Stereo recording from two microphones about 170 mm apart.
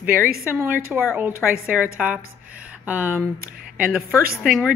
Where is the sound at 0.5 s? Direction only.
15° right (ahead or behind).